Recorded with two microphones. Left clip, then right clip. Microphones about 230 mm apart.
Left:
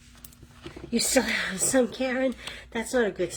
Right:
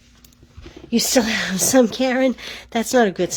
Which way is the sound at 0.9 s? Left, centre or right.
Right.